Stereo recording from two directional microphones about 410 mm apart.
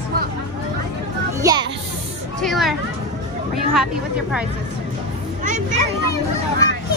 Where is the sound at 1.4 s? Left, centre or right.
Centre.